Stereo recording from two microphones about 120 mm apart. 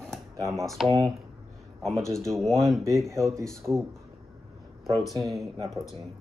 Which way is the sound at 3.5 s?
5° left (ahead or behind).